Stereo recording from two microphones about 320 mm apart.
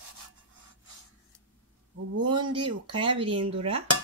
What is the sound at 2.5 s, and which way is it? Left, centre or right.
Speech, centre.